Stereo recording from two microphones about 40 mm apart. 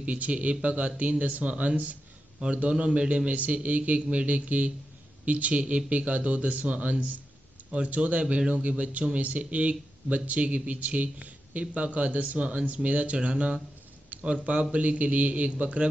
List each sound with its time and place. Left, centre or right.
0.0 s speech: right
8.4 s speech: right
8.6 s speech: right